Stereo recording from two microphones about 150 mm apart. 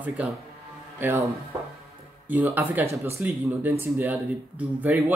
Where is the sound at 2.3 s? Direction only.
10° right (ahead or behind).